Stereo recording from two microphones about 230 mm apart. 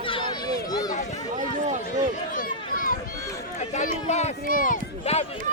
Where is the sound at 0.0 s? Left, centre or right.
Left.